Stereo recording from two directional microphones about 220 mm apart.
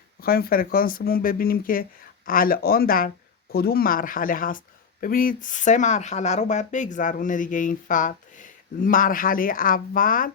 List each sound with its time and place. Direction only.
0.2 s speech: 45° left (ahead or behind)